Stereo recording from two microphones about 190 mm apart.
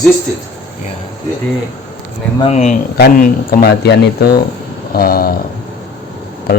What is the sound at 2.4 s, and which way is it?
Speech, 35° left (ahead or behind).